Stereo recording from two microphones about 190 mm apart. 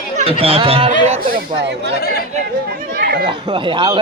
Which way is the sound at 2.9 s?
55° right (ahead or behind).